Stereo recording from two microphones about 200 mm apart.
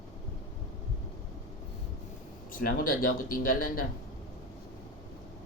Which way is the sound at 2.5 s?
45° left (ahead or behind).